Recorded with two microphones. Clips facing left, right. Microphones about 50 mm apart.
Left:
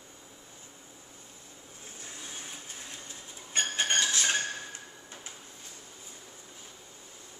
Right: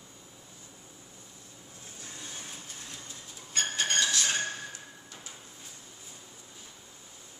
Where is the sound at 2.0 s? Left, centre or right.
Centre.